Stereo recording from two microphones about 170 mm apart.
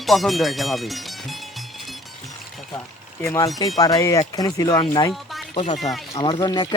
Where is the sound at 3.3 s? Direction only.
20° left (ahead or behind).